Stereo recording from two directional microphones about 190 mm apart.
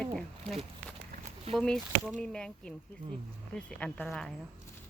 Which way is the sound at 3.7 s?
5° left (ahead or behind).